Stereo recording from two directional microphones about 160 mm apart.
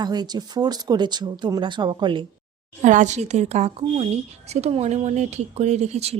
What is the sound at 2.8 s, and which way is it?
A woman's voice, 50° right (ahead or behind).